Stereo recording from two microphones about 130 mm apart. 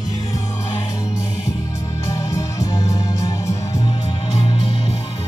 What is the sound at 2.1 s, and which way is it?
Music, 25° left (ahead or behind).